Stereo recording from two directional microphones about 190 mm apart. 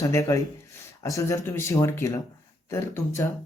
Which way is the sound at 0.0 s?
15° left (ahead or behind).